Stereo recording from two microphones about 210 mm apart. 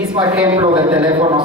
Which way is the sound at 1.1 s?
25° right (ahead or behind).